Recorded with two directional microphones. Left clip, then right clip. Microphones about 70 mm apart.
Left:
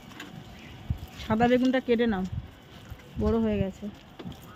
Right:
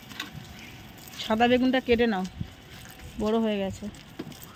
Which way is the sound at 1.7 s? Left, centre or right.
Left.